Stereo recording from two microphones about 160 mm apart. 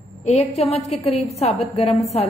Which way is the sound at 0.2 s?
45° left (ahead or behind).